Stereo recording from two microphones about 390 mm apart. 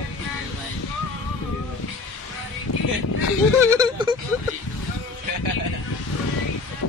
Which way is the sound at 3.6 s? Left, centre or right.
Centre.